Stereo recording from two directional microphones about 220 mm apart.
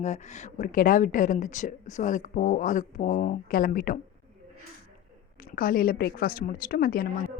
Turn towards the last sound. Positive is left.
turn(degrees=40)  # may be behind; listen again after turning